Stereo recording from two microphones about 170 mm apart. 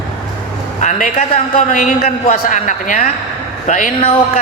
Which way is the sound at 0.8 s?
50° left (ahead or behind).